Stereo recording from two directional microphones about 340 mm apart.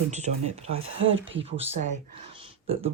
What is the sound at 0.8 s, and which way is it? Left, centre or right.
Speech, right.